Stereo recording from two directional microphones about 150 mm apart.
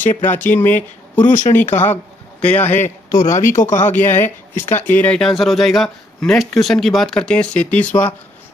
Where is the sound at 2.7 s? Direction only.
55° left (ahead or behind).